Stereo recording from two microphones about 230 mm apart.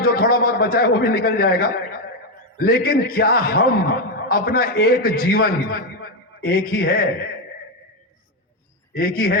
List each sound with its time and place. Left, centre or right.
0.0 s a man's voice: left
9.0 s a man's voice: left